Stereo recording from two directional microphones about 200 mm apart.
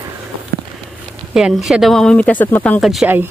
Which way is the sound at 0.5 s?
45° right (ahead or behind).